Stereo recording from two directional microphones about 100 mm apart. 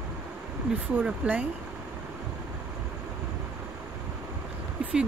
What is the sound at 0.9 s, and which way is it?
Speech, 15° right (ahead or behind).